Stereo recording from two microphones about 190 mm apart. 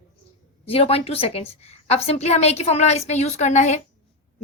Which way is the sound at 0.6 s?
30° left (ahead or behind).